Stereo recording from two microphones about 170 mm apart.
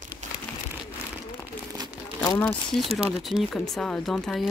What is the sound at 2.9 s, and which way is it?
Speech, 35° right (ahead or behind).